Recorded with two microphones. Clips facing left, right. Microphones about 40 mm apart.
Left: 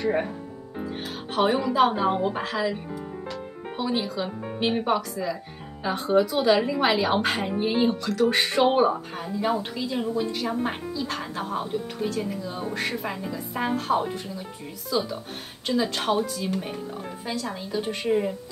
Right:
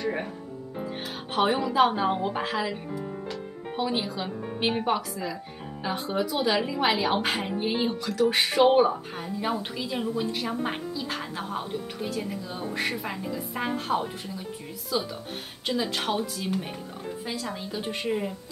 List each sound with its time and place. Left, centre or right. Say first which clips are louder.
0.0 s speech: left 5 dB; centre
1.3 s a woman's voice: left 1 dB; centre
17.6 s speech: left 3 dB; centre
18.0 s a woman's voice: left 5 dB; centre